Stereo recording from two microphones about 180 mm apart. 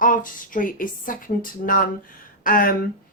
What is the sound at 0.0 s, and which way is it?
Speech, 50° left (ahead or behind).